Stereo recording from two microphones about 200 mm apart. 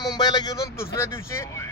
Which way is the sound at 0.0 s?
20° left (ahead or behind).